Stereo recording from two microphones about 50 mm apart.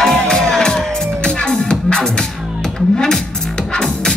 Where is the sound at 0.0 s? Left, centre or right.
Centre.